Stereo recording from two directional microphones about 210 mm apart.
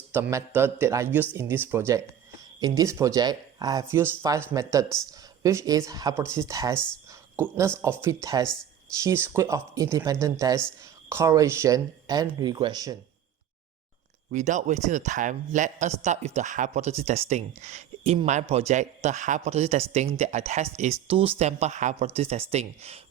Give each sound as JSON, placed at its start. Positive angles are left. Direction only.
{"t": 0.1, "sound": "speech", "side_deg": -15}
{"t": 6.7, "sound": "speech", "side_deg": 5}
{"t": 7.1, "sound": "a sound", "side_deg": -15}
{"t": 7.8, "sound": "speech", "side_deg": -10}
{"t": 14.3, "sound": "speech", "side_deg": -35}